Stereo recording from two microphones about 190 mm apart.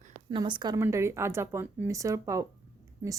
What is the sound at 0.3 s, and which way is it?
A woman's voice, 25° right (ahead or behind).